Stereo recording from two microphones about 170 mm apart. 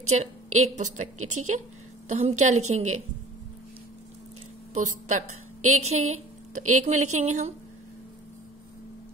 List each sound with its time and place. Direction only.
0.1 s a woman's voice: 40° right (ahead or behind)
4.7 s speech: 45° right (ahead or behind)